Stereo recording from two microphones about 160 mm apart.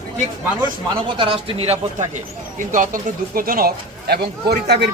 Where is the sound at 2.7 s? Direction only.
55° right (ahead or behind).